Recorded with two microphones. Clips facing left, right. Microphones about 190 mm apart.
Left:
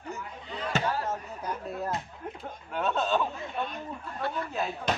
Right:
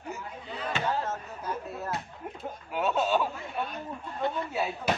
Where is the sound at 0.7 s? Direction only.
40° left (ahead or behind).